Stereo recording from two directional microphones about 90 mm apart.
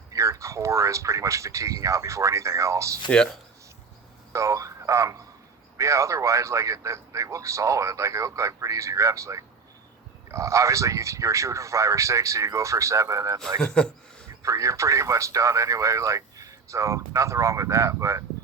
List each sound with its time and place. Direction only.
0.1 s speech: 35° right (ahead or behind)
3.1 s speech: 10° left (ahead or behind)
4.3 s speech: 35° right (ahead or behind)
13.6 s a sound: 10° left (ahead or behind)
14.4 s speech: 35° right (ahead or behind)